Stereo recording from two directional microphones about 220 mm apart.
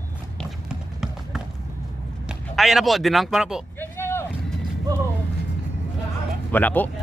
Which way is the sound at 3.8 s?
10° left (ahead or behind).